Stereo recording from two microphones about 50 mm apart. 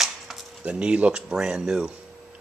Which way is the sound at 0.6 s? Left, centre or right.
Right.